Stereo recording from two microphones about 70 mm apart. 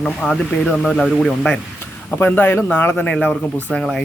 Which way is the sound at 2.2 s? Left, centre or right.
Left.